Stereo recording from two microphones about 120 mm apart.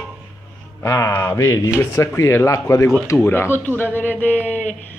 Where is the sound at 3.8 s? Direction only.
15° left (ahead or behind).